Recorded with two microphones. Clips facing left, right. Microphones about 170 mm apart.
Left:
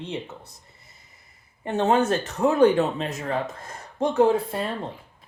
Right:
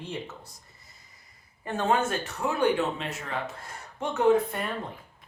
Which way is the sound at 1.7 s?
25° left (ahead or behind).